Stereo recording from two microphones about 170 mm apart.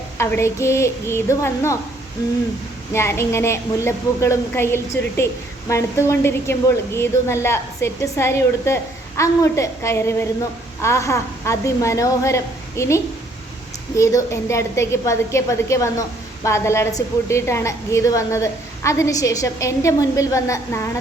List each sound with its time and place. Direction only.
0.2 s a woman's voice: 15° left (ahead or behind)
2.9 s a woman's voice: 15° left (ahead or behind)